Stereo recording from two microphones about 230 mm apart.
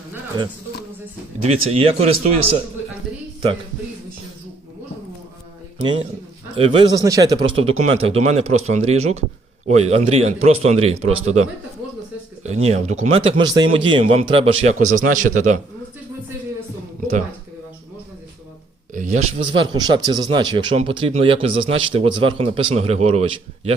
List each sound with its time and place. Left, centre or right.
1.5 s a man's voice: right
6.6 s a man's voice: right
12.4 s a man's voice: right
18.9 s a man's voice: right
19.5 s a man's voice: centre